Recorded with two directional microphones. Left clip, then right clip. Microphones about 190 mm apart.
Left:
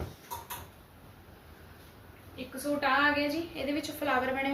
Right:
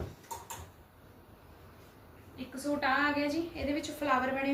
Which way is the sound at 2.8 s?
30° right (ahead or behind).